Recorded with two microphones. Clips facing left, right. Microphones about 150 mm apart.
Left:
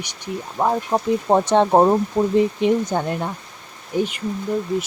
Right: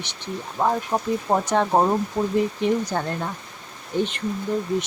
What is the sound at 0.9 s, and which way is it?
Speech, 25° left (ahead or behind).